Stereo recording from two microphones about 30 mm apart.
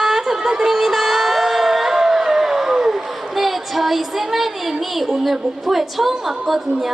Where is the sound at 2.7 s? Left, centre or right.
Centre.